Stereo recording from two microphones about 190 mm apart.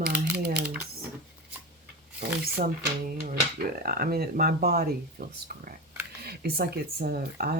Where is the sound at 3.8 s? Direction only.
50° right (ahead or behind).